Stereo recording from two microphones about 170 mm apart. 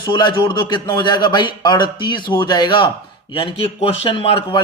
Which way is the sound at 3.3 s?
30° left (ahead or behind).